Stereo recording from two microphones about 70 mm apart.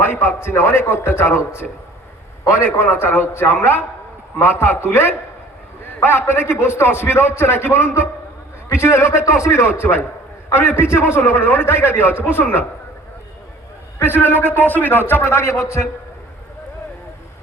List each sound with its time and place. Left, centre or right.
0.0 s a man's voice: left
14.0 s a man's voice: left